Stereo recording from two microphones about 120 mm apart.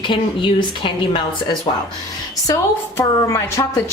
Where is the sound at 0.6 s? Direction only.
45° left (ahead or behind).